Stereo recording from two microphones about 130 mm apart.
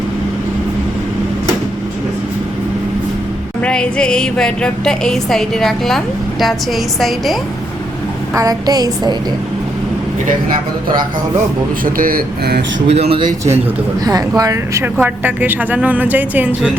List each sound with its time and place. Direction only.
3.6 s speech: 5° left (ahead or behind)
8.4 s speech: 30° right (ahead or behind)
11.9 s speech: 90° right
12.9 s a man's voice: 55° right (ahead or behind)
14.0 s speech: 30° right (ahead or behind); by 16.7 s 10° right (ahead or behind)